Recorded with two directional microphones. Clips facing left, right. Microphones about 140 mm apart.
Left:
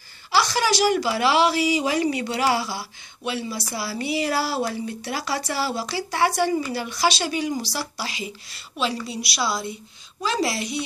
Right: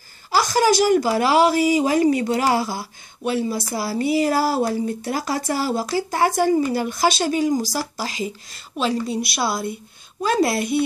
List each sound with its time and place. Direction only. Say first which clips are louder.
0.3 s a woman's voice: right 4 dB; 45° right (ahead or behind)